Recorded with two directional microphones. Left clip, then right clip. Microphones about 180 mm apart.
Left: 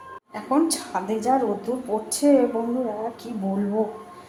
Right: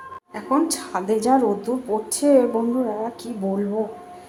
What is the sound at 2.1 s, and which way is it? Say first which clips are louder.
Speech: even; 10° right (ahead or behind).